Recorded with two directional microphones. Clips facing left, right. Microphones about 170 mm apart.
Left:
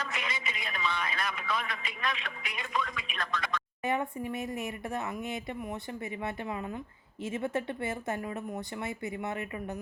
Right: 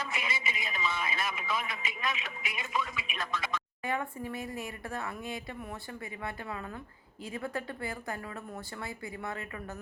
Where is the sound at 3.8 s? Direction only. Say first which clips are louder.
Left 4 dB; 20° left (ahead or behind).